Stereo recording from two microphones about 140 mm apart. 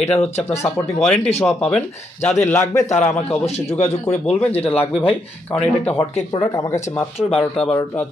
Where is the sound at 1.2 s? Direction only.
50° left (ahead or behind).